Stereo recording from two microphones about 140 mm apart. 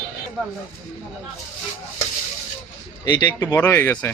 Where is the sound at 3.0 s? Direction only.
30° left (ahead or behind).